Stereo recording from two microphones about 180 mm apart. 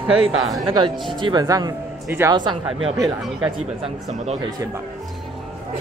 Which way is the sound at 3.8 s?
35° right (ahead or behind).